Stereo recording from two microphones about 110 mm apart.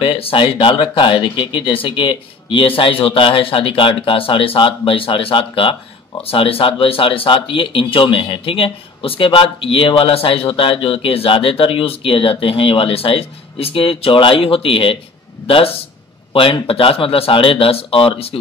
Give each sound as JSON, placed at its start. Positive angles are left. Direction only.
{"t": 0.0, "sound": "speech", "side_deg": 55}